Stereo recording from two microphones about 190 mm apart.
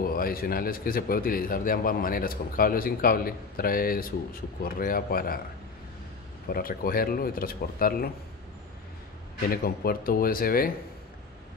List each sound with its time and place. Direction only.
0.0 s a man's voice: 50° left (ahead or behind)
6.4 s a man's voice: 50° left (ahead or behind)
9.5 s a man's voice: 55° left (ahead or behind)